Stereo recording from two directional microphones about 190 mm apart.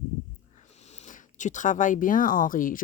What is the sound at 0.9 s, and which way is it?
Speech, 40° left (ahead or behind).